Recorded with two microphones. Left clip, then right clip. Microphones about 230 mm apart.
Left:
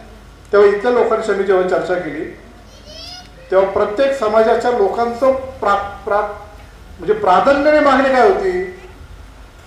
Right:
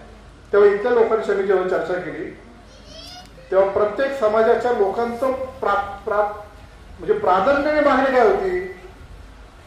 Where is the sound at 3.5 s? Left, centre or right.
Left.